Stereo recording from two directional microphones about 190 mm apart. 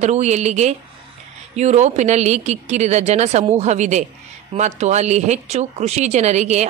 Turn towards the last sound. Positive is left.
turn(degrees=-35)  # may be behind; listen again after turning